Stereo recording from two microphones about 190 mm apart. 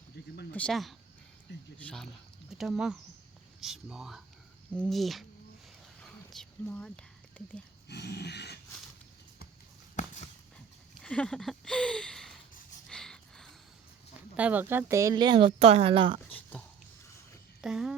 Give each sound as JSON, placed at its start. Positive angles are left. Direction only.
{"t": 0.5, "sound": "speech", "side_deg": 5}
{"t": 6.0, "sound": "a sound", "side_deg": 5}
{"t": 7.9, "sound": "dog", "side_deg": 60}
{"t": 9.9, "sound": "dog", "side_deg": 40}
{"t": 11.0, "sound": "speech", "side_deg": 5}
{"t": 12.9, "sound": "a sound", "side_deg": 5}
{"t": 14.3, "sound": "speech", "side_deg": -10}
{"t": 16.3, "sound": "a sound", "side_deg": 10}
{"t": 17.6, "sound": "speech", "side_deg": -5}